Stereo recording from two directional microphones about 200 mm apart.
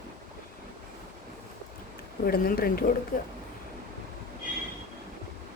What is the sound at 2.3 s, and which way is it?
Speech, 50° left (ahead or behind).